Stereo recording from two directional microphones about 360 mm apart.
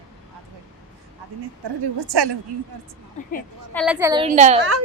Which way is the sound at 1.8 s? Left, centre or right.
Right.